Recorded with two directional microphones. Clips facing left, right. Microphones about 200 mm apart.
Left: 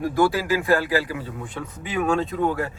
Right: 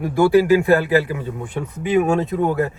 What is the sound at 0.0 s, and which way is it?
Speech, 15° right (ahead or behind).